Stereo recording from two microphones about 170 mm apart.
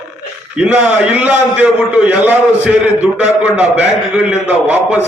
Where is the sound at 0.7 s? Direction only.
5° right (ahead or behind).